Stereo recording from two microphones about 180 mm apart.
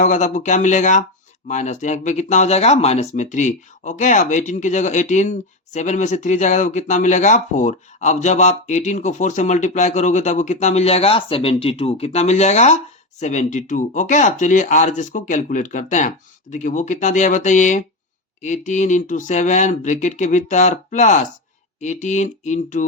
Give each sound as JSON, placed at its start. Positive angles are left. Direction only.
{"t": 0.0, "sound": "speech", "side_deg": 40}